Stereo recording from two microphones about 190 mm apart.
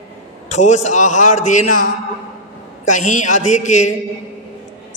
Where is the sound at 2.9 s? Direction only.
40° left (ahead or behind).